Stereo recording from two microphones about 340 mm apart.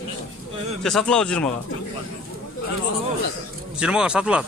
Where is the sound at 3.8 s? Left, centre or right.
Centre.